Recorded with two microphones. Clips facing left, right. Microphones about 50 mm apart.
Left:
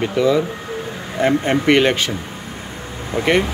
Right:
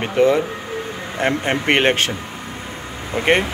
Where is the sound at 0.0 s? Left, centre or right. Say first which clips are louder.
Right 1 dB; right.